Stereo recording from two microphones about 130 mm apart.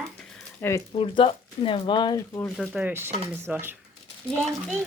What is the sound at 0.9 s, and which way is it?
Speech, 45° left (ahead or behind).